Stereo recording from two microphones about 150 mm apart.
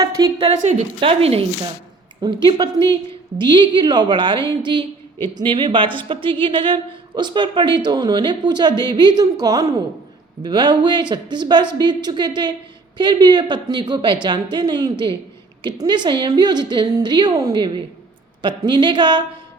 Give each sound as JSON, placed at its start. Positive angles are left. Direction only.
{"t": 0.0, "sound": "a sound", "side_deg": -25}
{"t": 0.3, "sound": "a woman's voice", "side_deg": -40}
{"t": 2.2, "sound": "a woman's voice", "side_deg": -30}
{"t": 2.7, "sound": "a woman's voice", "side_deg": 20}
{"t": 3.3, "sound": "a woman's voice", "side_deg": -30}